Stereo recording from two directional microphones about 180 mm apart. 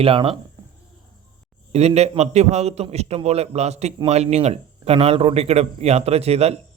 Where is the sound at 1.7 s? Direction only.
35° right (ahead or behind).